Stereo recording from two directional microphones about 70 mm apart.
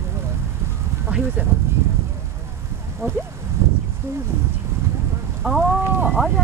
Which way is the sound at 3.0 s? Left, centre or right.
Right.